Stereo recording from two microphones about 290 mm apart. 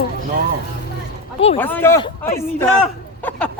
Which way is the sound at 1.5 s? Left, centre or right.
Centre.